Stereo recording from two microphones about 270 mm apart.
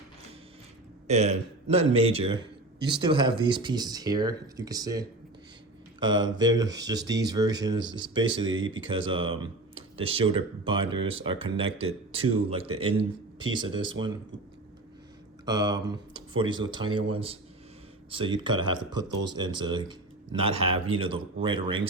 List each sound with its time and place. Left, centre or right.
1.0 s speech: right
15.4 s speech: centre